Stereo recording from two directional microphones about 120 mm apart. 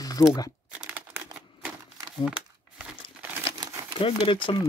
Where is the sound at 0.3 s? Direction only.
30° left (ahead or behind).